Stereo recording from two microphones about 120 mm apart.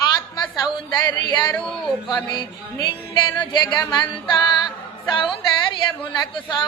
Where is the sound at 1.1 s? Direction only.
35° left (ahead or behind).